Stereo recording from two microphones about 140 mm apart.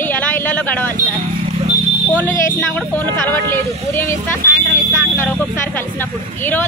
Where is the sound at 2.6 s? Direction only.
10° left (ahead or behind).